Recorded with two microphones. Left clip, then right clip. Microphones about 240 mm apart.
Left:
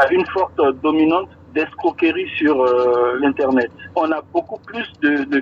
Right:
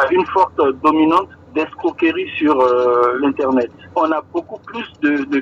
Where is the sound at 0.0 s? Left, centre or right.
Right.